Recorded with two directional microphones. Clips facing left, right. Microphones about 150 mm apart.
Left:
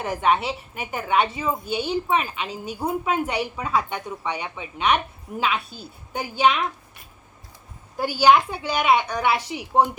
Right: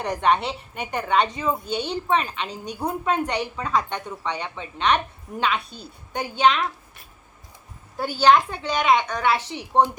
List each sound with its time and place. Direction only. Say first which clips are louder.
0.0 s a woman's voice: even; 5° left (ahead or behind)
7.9 s a woman's voice: even; 10° left (ahead or behind)